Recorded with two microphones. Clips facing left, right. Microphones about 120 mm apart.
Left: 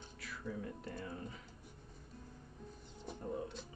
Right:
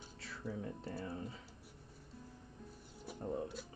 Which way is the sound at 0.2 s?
30° right (ahead or behind).